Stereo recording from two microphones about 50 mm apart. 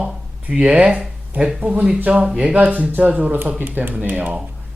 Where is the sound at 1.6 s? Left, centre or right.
Right.